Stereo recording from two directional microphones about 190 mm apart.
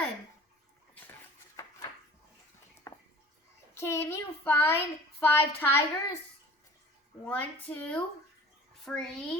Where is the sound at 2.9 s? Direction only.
15° left (ahead or behind).